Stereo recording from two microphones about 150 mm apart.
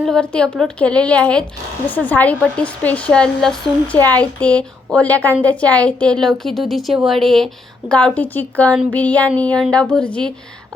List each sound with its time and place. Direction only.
0.0 s a woman's voice: 5° left (ahead or behind)